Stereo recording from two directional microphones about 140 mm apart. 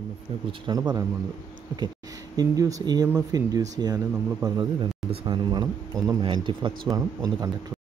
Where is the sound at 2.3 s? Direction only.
25° right (ahead or behind).